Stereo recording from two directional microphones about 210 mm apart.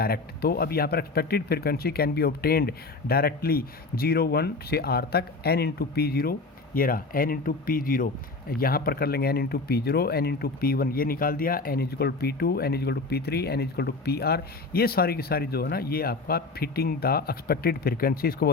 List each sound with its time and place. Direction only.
0.0 s speech: 45° left (ahead or behind)